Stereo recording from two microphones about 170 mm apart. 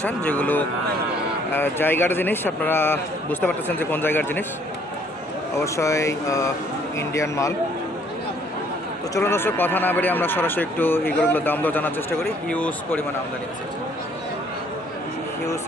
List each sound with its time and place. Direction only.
0.0 s speech: 10° left (ahead or behind)
5.6 s speech: 15° left (ahead or behind)
9.1 s speech: 15° left (ahead or behind)